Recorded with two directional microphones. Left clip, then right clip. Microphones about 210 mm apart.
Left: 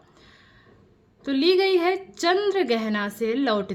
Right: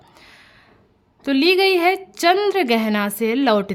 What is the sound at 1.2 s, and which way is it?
A woman's voice, 35° right (ahead or behind).